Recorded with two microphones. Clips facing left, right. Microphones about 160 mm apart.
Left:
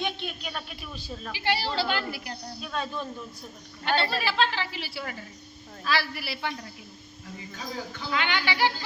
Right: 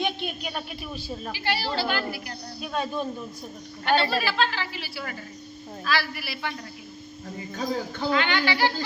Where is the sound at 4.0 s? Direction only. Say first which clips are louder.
Left 1 dB; 25° left (ahead or behind).